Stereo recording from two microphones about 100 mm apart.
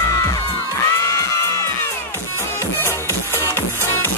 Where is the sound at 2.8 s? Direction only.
25° left (ahead or behind).